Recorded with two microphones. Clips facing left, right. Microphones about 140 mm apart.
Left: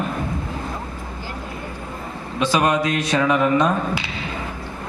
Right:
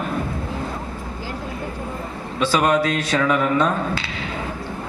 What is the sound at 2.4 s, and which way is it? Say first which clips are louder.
A man's voice: right 1 dB; 15° left (ahead or behind).